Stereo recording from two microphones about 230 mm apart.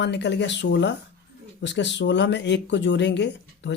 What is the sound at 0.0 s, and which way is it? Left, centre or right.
Speech, left.